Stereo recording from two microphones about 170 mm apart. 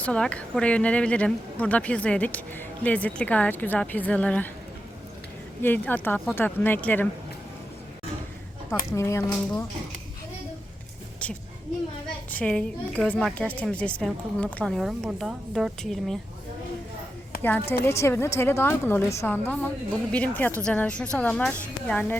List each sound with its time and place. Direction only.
0.0 s speech: 5° left (ahead or behind)
5.6 s speech: 10° left (ahead or behind)
8.7 s speech: 15° left (ahead or behind)
12.3 s a woman's voice: 5° left (ahead or behind)
17.4 s speech: 15° left (ahead or behind)